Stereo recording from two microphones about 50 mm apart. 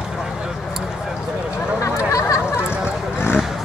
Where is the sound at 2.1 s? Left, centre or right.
Left.